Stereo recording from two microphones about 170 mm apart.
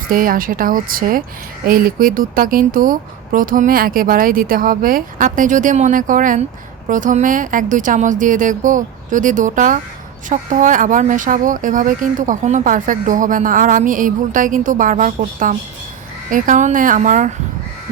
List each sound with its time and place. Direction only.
0.1 s speech: 55° right (ahead or behind)